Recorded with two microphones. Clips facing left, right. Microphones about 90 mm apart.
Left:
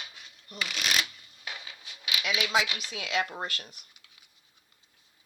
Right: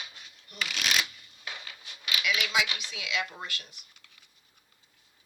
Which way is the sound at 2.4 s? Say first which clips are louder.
Left 2 dB; 35° left (ahead or behind).